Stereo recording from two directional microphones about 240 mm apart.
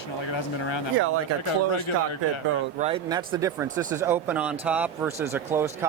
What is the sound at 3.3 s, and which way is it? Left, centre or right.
Speech, centre.